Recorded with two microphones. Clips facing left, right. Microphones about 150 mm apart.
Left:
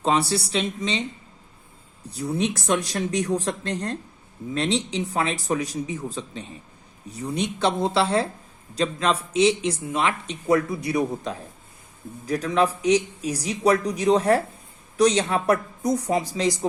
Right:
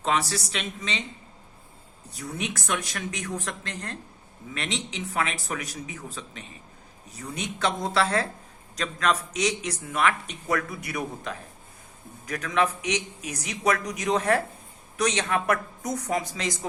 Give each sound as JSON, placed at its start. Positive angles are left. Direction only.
{"t": 0.0, "sound": "speech", "side_deg": 30}
{"t": 2.1, "sound": "speech", "side_deg": 30}